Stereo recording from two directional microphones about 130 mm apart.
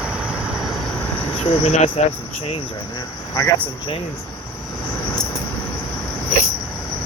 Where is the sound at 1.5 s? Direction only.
60° left (ahead or behind).